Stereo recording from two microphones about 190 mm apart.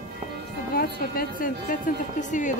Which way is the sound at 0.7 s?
50° left (ahead or behind).